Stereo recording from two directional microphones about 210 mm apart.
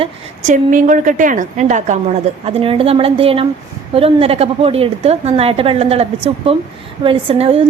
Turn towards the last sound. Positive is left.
turn(degrees=-25)  # may be behind; listen again after turning